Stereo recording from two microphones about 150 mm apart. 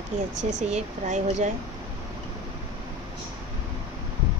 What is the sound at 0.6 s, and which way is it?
Speech, 50° right (ahead or behind).